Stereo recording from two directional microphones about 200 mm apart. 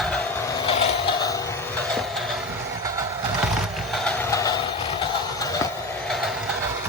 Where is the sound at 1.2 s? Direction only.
15° left (ahead or behind).